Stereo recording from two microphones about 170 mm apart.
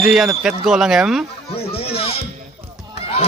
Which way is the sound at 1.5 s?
35° left (ahead or behind).